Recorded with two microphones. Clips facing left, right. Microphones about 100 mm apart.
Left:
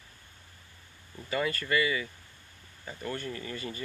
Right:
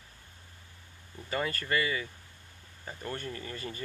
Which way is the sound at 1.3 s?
30° right (ahead or behind).